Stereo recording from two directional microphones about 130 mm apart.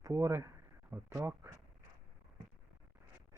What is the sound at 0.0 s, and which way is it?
Speech, 20° right (ahead or behind).